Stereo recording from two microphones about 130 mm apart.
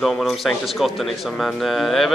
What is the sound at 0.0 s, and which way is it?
Speech, centre (ahead or behind).